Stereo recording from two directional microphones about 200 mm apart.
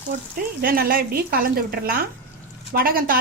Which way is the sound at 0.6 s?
45° right (ahead or behind).